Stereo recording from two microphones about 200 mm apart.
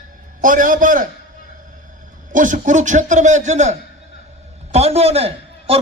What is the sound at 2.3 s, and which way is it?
A man's voice, 40° right (ahead or behind).